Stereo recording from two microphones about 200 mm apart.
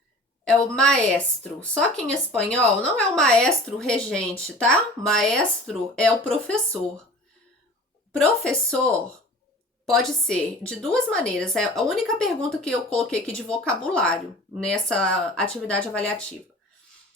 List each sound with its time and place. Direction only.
0.4 s a woman's voice: 5° left (ahead or behind)
8.1 s a woman's voice: 5° left (ahead or behind)